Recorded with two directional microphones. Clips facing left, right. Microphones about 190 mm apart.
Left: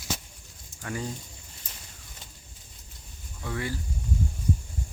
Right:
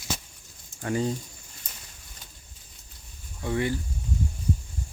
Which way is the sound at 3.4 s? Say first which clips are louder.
Right 6 dB; 20° right (ahead or behind).